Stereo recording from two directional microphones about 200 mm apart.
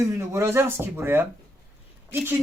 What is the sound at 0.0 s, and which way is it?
Speech, 15° right (ahead or behind).